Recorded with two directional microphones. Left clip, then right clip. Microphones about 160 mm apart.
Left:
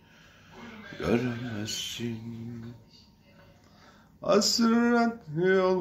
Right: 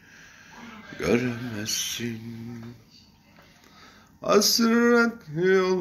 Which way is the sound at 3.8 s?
20° left (ahead or behind).